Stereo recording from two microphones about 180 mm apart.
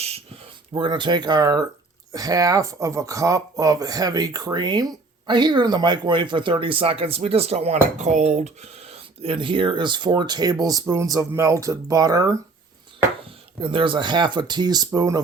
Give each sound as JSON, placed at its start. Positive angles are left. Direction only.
{"t": 0.7, "sound": "speech", "side_deg": -25}
{"t": 13.6, "sound": "speech", "side_deg": -30}